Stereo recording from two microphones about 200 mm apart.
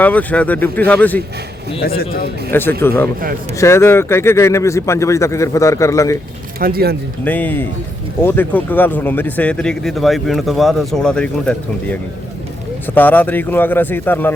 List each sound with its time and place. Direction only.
0.0 s speech: 10° left (ahead or behind)
2.5 s speech: 10° left (ahead or behind)
6.6 s speech: 50° right (ahead or behind)
7.3 s speech: 10° left (ahead or behind)